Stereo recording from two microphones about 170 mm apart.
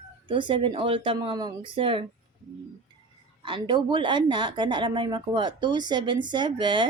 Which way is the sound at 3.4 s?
30° right (ahead or behind).